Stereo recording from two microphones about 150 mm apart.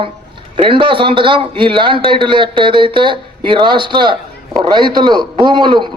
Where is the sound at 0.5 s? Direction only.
35° right (ahead or behind).